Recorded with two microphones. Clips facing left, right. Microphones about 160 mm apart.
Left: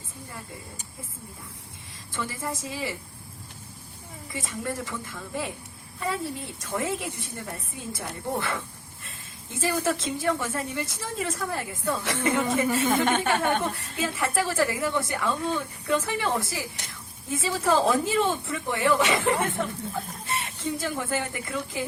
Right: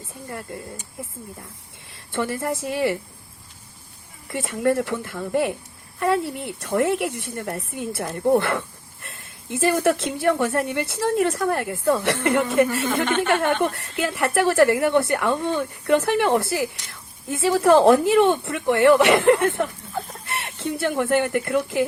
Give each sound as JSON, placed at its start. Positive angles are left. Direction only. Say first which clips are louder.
{"t": 2.1, "sound": "speech", "louder": "right 8 dB", "side_deg": -65}
{"t": 4.3, "sound": "speech", "louder": "right 11 dB", "side_deg": -65}